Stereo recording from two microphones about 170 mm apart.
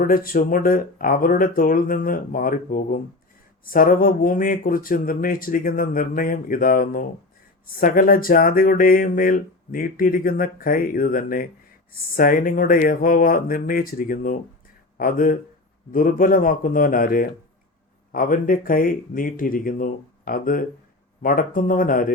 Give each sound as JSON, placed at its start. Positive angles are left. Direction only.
{"t": 0.0, "sound": "speech", "side_deg": 55}